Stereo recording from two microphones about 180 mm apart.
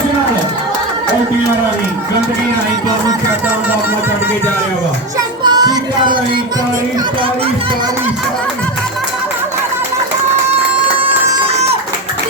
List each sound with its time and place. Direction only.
5.4 s music: 20° right (ahead or behind)
11.0 s music: 35° right (ahead or behind)